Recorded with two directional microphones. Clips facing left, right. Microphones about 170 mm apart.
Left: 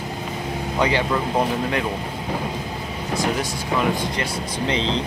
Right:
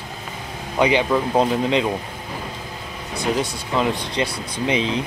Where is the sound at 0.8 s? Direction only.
15° right (ahead or behind).